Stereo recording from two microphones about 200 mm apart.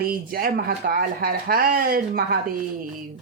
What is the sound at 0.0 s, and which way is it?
Speech, 45° right (ahead or behind).